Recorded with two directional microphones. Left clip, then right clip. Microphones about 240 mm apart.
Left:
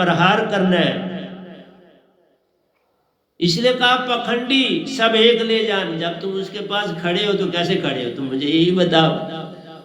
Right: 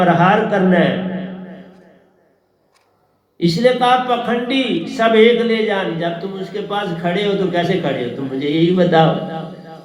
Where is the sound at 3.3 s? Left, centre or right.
Left.